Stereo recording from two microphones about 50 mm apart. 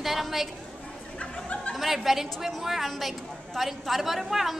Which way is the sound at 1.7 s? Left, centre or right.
Centre.